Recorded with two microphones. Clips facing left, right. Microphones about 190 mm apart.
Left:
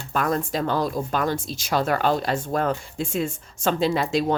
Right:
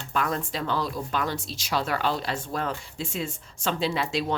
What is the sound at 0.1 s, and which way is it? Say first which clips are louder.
Speech: left 4 dB; 45° left (ahead or behind).